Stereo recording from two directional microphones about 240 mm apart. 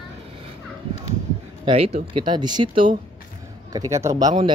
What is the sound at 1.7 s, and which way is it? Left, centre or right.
A man's voice, right.